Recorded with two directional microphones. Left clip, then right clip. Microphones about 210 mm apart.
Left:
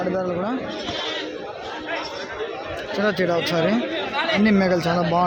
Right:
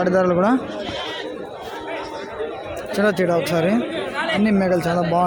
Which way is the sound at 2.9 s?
15° right (ahead or behind).